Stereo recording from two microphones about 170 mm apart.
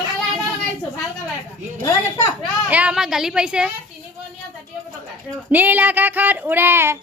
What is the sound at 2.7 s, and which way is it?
A child's voice, 5° right (ahead or behind).